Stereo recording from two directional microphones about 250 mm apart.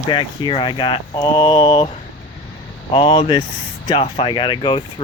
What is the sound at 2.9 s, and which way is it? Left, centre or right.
Speech, left.